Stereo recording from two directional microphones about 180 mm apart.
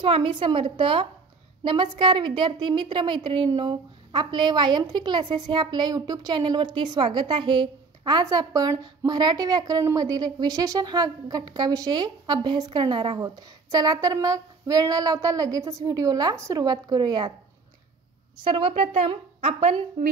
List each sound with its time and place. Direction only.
0.0 s a woman's voice: 30° right (ahead or behind)
18.4 s a woman's voice: 30° right (ahead or behind)